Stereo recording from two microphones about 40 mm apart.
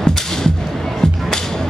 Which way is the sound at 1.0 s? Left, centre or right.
Centre.